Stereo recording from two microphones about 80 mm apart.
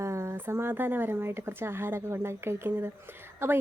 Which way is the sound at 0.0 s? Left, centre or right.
Right.